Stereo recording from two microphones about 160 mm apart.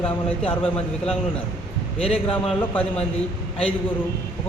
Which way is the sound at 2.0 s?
40° left (ahead or behind).